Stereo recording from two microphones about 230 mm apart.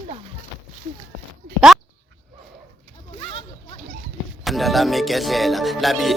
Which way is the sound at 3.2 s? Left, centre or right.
Left.